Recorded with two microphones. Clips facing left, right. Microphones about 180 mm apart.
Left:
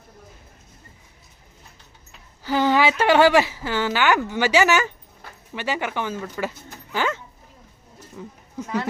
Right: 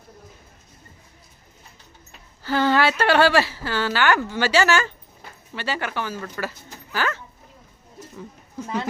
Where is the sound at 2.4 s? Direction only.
15° left (ahead or behind).